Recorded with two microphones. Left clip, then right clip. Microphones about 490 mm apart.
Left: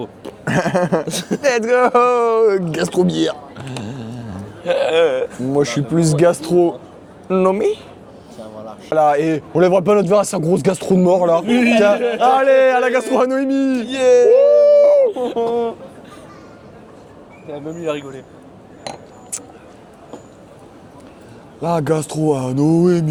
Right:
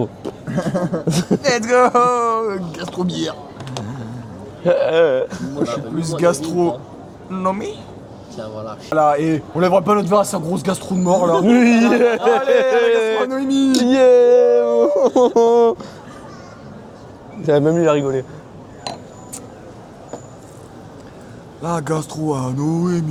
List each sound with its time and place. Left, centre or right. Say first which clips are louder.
0.0 s chuckle: right 5 dB; centre
0.4 s speech: left 6 dB; left
1.0 s speech: right 3 dB; centre
1.4 s speech: left 1 dB; left
4.6 s a man's voice: right 1 dB; right
5.6 s a man's voice: left 5 dB; left
8.9 s a man's voice: left 1 dB; left
11.4 s a man's voice: left 1 dB; right
12.3 s a man's voice: left 2 dB; left
13.8 s speech: right 1 dB; right
15.2 s speech: right 7 dB; right
17.7 s a man's voice: right 8 dB; right
21.6 s speech: left 4 dB; left